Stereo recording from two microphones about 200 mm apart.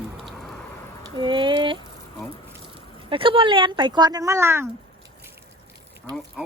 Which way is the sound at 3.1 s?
25° right (ahead or behind).